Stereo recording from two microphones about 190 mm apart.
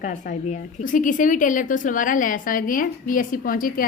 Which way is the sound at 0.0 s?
40° left (ahead or behind).